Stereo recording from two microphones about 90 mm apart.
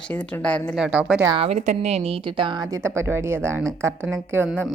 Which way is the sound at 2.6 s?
35° right (ahead or behind).